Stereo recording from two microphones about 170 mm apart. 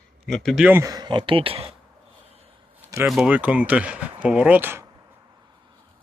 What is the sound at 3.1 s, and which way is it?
Speech, 5° right (ahead or behind).